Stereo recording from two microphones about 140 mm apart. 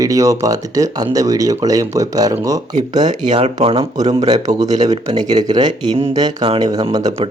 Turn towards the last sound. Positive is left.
turn(degrees=-30)  # may be behind; listen again after turning